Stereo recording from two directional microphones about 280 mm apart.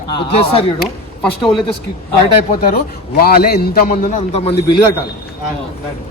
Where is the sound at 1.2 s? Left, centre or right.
Centre.